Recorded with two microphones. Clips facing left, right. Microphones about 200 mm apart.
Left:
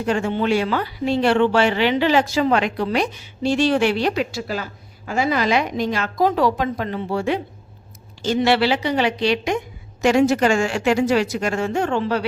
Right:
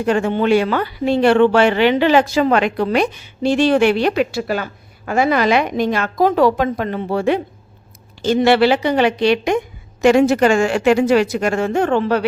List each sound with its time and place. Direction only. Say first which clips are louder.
0.0 s speech: right 4 dB; 60° right (ahead or behind)